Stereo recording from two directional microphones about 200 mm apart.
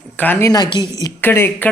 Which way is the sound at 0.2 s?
10° left (ahead or behind).